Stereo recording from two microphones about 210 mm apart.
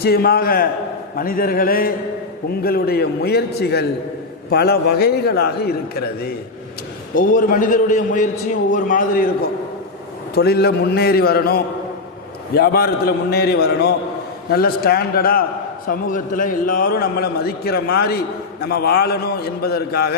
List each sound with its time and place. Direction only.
0.0 s a man's voice: 50° left (ahead or behind)
10.3 s a man's voice: 50° left (ahead or behind)